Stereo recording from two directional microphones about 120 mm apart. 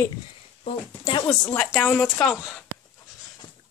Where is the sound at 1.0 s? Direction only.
45° left (ahead or behind).